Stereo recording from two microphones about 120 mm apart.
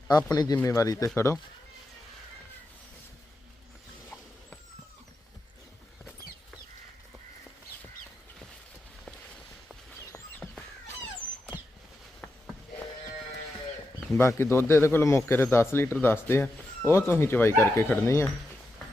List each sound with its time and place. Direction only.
0.1 s speech: 35° left (ahead or behind)
14.1 s speech: 20° left (ahead or behind)